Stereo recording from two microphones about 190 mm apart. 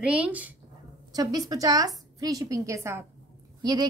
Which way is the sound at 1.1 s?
20° right (ahead or behind).